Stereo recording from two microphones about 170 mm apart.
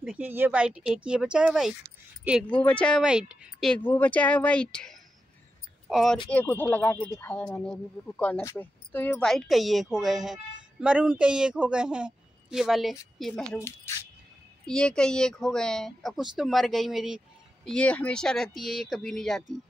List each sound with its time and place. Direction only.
0.0 s speech: 10° right (ahead or behind)
6.3 s speech: 10° left (ahead or behind)
13.6 s speech: 15° left (ahead or behind)
14.7 s speech: 5° left (ahead or behind)